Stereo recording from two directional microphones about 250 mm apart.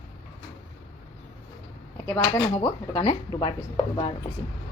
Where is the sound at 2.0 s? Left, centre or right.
Centre.